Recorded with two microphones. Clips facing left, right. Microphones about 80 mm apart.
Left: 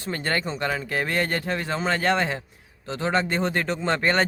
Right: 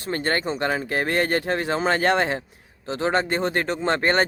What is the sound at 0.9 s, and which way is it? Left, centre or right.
Speech, right.